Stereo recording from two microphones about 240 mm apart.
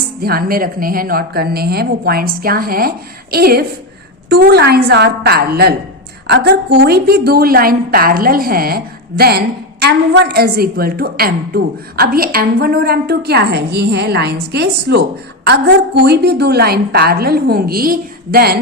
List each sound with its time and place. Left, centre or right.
0.2 s a woman's voice: right